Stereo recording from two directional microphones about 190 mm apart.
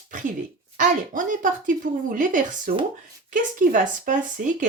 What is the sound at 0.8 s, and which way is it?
Speech, 45° right (ahead or behind).